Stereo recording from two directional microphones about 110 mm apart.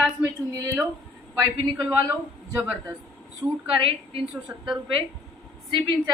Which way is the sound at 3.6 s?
55° right (ahead or behind).